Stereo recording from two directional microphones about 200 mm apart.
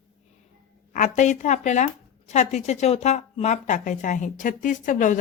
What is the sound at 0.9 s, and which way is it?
Speech, 40° left (ahead or behind).